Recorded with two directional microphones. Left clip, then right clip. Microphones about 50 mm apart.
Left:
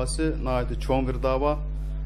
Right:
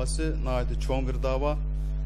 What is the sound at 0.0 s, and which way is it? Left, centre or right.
Speech, right.